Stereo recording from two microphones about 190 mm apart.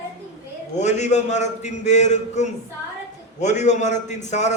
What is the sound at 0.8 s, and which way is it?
A man's voice, 40° left (ahead or behind).